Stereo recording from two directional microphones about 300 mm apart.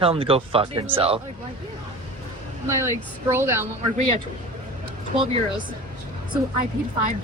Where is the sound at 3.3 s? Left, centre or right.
Centre.